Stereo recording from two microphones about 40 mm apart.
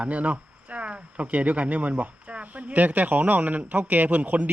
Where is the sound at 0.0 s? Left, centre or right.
Right.